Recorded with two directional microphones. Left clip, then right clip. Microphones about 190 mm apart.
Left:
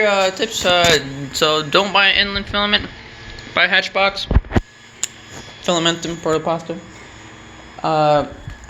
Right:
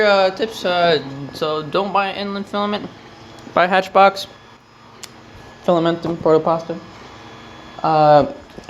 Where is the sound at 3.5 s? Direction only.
35° right (ahead or behind).